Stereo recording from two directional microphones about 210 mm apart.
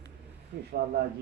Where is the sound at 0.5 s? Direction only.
45° right (ahead or behind).